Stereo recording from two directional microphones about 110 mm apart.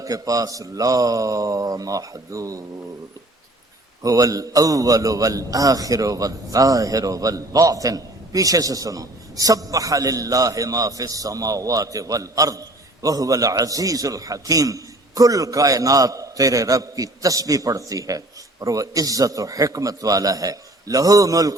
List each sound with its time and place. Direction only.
0.0 s a man's voice: 30° right (ahead or behind)
4.0 s a man's voice: 30° right (ahead or behind)